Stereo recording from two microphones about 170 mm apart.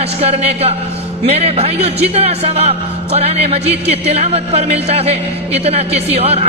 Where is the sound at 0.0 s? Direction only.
35° right (ahead or behind).